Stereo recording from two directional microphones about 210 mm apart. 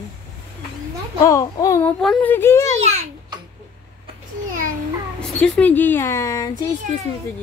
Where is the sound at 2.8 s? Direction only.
30° right (ahead or behind).